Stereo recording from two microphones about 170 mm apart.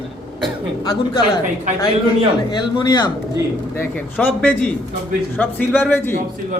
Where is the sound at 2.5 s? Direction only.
25° left (ahead or behind).